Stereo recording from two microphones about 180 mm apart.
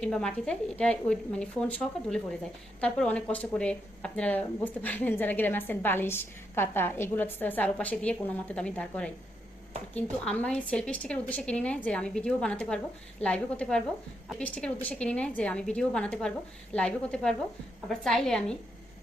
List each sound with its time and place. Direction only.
0.0 s a woman's voice: 5° left (ahead or behind)